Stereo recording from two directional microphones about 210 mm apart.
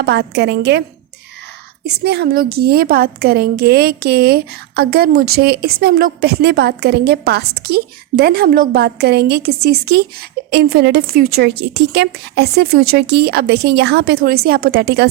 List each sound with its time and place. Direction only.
0.0 s a woman's voice: 50° right (ahead or behind)
2.0 s a woman's voice: 50° right (ahead or behind)